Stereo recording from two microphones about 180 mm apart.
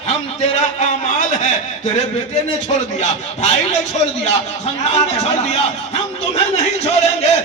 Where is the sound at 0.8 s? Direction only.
40° left (ahead or behind).